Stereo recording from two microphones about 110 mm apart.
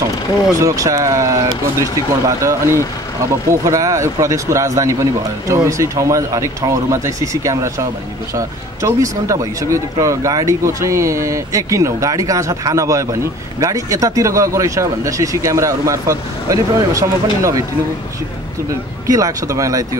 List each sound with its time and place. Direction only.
0.6 s speech: 30° right (ahead or behind)
19.0 s speech: 30° right (ahead or behind)